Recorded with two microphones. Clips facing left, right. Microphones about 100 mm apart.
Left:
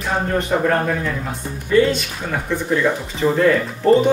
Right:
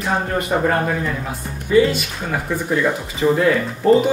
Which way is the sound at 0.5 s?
15° right (ahead or behind).